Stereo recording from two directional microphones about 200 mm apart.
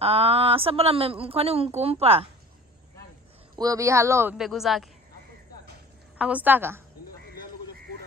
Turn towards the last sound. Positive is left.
turn(degrees=-10)  # may be behind; listen again after turning